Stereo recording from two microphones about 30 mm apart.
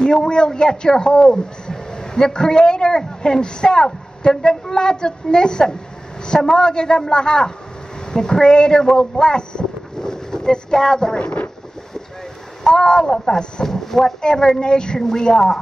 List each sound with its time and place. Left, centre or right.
0.0 s a woman's voice: left
9.9 s boat: left
12.6 s speech: left
13.7 s speech: centre; by 15.0 s left
15.0 s speech: centre